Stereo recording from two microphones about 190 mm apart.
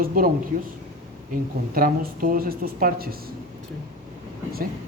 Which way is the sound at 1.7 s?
50° right (ahead or behind).